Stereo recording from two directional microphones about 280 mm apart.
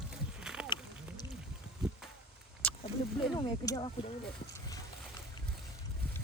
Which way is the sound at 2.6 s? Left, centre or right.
Centre.